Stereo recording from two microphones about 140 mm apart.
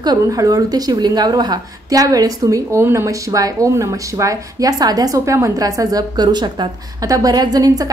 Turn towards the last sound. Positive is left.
turn(degrees=-25)  # may be behind; listen again after turning